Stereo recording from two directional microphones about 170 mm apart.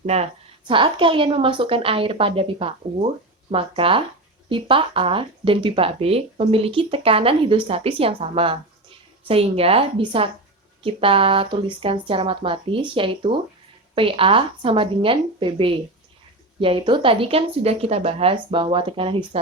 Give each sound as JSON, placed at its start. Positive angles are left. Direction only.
{"t": 0.0, "sound": "speech", "side_deg": -40}